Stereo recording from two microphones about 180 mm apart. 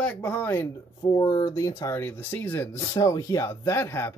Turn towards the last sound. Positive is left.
turn(degrees=15)  # may be behind; listen again after turning